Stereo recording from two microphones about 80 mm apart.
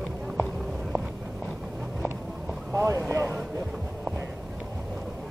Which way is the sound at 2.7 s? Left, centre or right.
Right.